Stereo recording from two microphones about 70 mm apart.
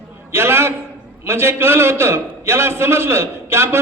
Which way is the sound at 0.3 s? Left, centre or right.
Right.